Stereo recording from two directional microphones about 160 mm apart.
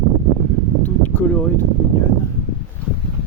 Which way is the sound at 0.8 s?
10° left (ahead or behind).